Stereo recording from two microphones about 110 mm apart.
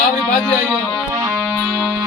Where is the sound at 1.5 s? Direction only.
5° left (ahead or behind).